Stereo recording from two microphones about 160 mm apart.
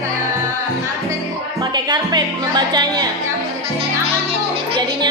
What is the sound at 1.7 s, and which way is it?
A woman's voice, 25° right (ahead or behind).